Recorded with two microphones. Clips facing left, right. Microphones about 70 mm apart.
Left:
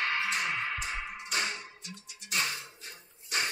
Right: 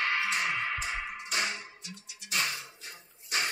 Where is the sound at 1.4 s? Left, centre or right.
Left.